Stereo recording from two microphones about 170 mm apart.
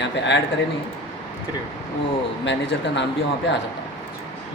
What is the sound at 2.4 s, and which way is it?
Speech, 90° left.